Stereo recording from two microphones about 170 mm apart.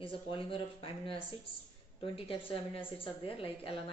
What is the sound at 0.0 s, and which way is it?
A woman's voice, 30° left (ahead or behind).